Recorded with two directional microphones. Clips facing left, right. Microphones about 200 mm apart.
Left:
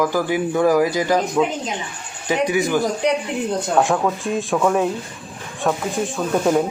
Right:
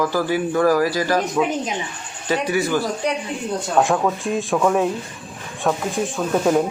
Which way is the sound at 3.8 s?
Centre (ahead or behind).